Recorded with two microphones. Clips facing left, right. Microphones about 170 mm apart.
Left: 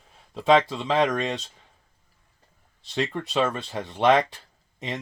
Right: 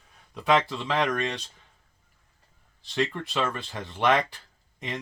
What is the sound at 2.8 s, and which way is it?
Speech, 20° left (ahead or behind).